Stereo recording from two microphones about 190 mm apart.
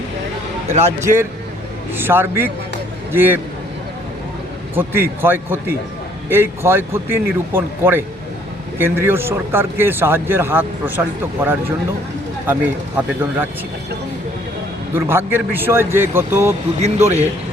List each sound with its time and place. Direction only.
0.9 s speech: 15° right (ahead or behind)
4.7 s speech: 10° right (ahead or behind)
13.0 s speech: 10° right (ahead or behind)
14.9 s speech: 10° right (ahead or behind)
16.8 s a man's voice: 35° right (ahead or behind)